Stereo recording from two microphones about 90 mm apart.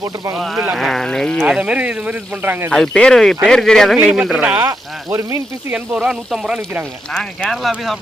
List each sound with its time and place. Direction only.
0.3 s speech: centre (ahead or behind)
1.4 s speech: 10° right (ahead or behind)
2.7 s speech: 10° left (ahead or behind)
3.9 s speech: 15° right (ahead or behind)
5.0 s speech: 35° right (ahead or behind)
5.7 s speech: 10° right (ahead or behind)
7.1 s speech: 10° left (ahead or behind)